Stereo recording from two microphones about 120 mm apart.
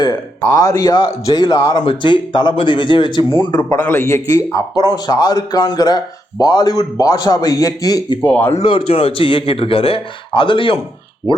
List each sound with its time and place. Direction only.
0.4 s a man's voice: 30° left (ahead or behind)
1.8 s a man's voice: 45° left (ahead or behind)
3.8 s a man's voice: 20° left (ahead or behind)
8.2 s speech: 15° left (ahead or behind)
8.6 s a man's voice: 50° left (ahead or behind)